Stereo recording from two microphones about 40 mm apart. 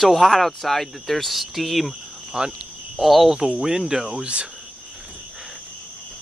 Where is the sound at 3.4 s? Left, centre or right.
Right.